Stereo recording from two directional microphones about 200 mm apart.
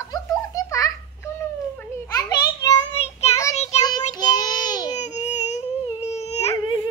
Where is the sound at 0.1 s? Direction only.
15° left (ahead or behind).